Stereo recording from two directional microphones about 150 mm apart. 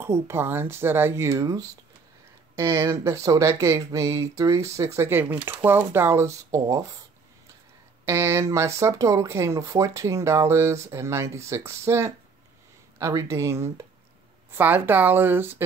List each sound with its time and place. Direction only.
0.0 s speech: 15° right (ahead or behind)
8.0 s speech: 15° right (ahead or behind)